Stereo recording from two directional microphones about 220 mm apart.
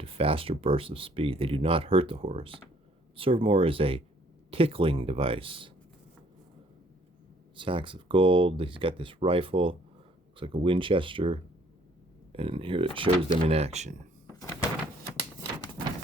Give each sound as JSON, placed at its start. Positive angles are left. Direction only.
{"t": 0.0, "sound": "speech", "side_deg": -25}
{"t": 7.5, "sound": "speech", "side_deg": -25}